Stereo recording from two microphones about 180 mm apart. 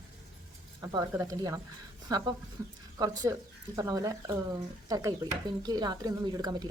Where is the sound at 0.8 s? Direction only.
20° right (ahead or behind).